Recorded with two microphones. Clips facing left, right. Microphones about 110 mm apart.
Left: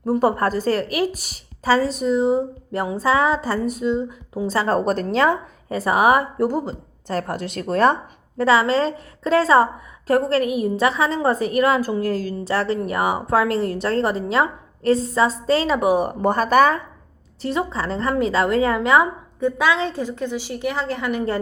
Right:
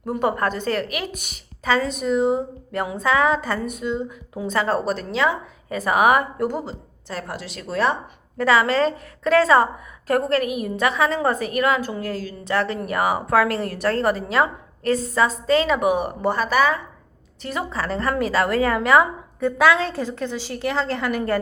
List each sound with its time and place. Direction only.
0.0 s a woman's voice: 35° left (ahead or behind)
4.9 s a woman's voice: 45° left (ahead or behind)
8.4 s a woman's voice: 30° left (ahead or behind); by 16.8 s 45° left (ahead or behind)
17.4 s a woman's voice: 30° left (ahead or behind)